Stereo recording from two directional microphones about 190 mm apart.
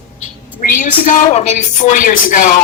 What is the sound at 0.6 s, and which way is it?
A woman's voice, 45° left (ahead or behind).